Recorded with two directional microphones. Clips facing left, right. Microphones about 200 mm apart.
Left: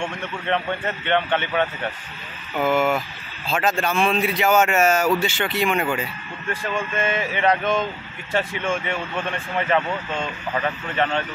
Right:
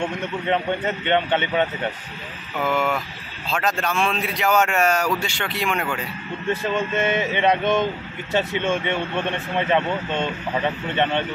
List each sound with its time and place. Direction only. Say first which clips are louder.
0.5 s a man's voice: right 1 dB; 15° right (ahead or behind)
2.6 s speech: left 3 dB; 5° left (ahead or behind)
6.5 s speech: right 3 dB; 20° right (ahead or behind)